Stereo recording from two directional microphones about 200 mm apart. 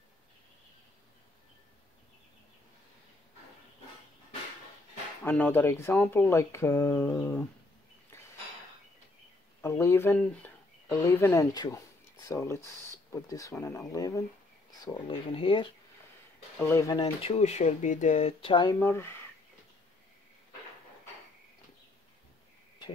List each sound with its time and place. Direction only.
5.2 s speech: 5° left (ahead or behind)
9.6 s speech: 15° left (ahead or behind)
16.5 s speech: 15° left (ahead or behind)
17.4 s speech: 35° left (ahead or behind); by 19.1 s 10° left (ahead or behind)